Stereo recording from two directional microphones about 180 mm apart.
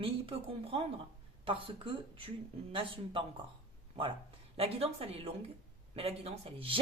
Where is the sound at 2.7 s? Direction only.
30° right (ahead or behind).